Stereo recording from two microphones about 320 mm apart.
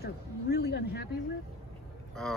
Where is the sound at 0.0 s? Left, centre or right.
Left.